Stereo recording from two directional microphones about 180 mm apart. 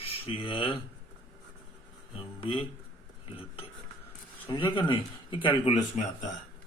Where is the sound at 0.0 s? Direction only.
30° left (ahead or behind).